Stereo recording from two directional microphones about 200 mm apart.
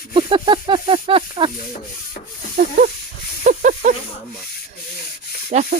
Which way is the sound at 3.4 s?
40° right (ahead or behind).